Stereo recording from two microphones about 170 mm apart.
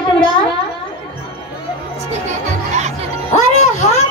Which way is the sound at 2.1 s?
45° right (ahead or behind).